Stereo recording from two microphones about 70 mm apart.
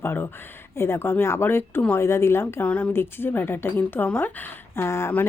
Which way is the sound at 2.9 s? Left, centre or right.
Left.